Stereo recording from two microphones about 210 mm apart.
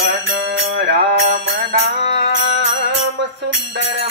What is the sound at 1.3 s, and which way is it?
Music, 55° right (ahead or behind).